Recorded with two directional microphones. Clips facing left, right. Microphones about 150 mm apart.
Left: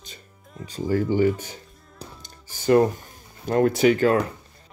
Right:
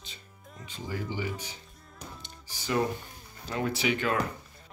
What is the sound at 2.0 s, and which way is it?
Music, 45° left (ahead or behind).